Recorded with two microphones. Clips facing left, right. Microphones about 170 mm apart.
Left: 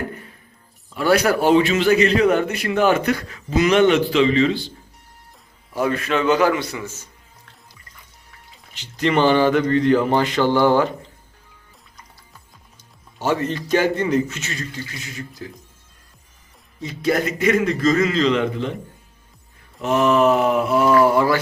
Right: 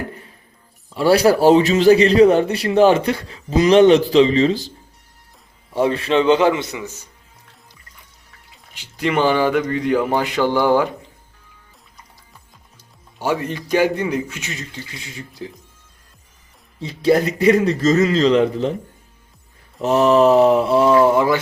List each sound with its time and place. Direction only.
0.9 s a man's voice: 30° right (ahead or behind)
5.7 s a man's voice: 30° right (ahead or behind)
8.7 s speech: 10° right (ahead or behind)
13.1 s speech: 10° right (ahead or behind)
15.4 s a man's voice: 25° right (ahead or behind)
16.8 s a man's voice: 30° right (ahead or behind)
19.8 s a man's voice: 35° right (ahead or behind)